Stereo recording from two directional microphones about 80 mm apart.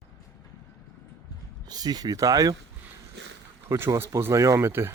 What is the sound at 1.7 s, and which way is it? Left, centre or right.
Speech, right.